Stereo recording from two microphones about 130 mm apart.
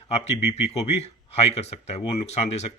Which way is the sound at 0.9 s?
55° left (ahead or behind).